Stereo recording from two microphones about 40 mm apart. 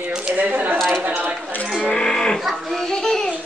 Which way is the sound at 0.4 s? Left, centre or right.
Right.